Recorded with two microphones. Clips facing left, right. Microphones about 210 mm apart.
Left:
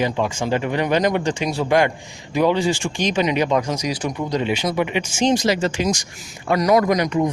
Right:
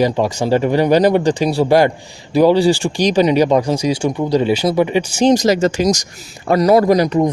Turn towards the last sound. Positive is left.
turn(degrees=-35)  # may be behind; listen again after turning